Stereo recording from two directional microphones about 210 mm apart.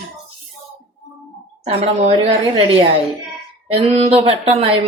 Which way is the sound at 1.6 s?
30° right (ahead or behind).